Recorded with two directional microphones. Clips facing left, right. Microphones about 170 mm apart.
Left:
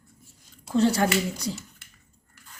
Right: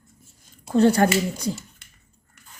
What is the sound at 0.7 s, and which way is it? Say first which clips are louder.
Speech: right 4 dB; 55° right (ahead or behind).